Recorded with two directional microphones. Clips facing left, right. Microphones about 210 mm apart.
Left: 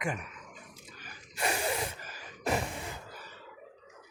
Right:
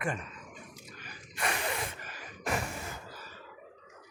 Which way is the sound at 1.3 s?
30° left (ahead or behind).